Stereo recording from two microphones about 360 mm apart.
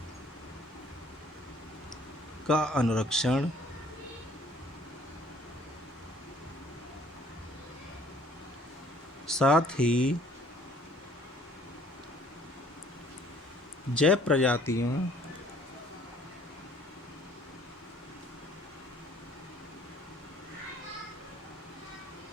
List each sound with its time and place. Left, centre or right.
2.5 s speech: centre
9.2 s speech: centre
13.9 s speech: centre